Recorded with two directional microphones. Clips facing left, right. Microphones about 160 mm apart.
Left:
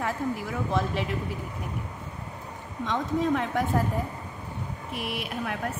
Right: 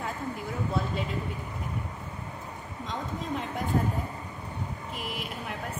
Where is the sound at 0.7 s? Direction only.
90° left.